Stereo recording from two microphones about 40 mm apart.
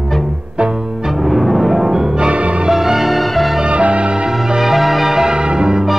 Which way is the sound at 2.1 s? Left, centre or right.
Right.